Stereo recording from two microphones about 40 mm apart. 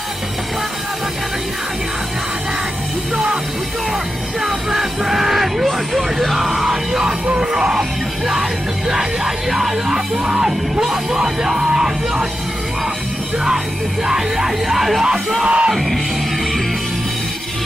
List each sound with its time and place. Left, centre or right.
4.4 s music: centre
9.8 s music: centre
14.0 s music: centre
15.4 s music: right